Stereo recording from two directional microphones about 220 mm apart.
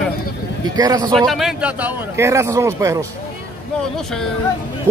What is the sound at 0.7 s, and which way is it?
Speech, 15° right (ahead or behind).